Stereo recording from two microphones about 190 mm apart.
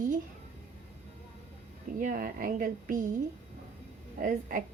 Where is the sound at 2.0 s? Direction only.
50° right (ahead or behind).